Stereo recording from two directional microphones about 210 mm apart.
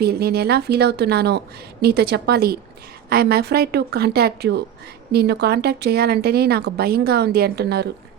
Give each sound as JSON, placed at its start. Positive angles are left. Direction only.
{"t": 0.0, "sound": "speech", "side_deg": -50}